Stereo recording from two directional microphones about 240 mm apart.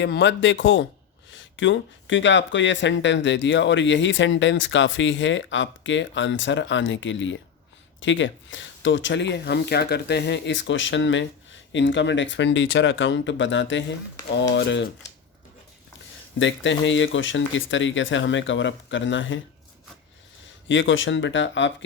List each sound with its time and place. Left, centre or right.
0.0 s speech: left
16.4 s speech: left
20.7 s speech: left